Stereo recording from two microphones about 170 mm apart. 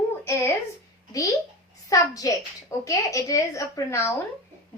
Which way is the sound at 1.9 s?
20° left (ahead or behind).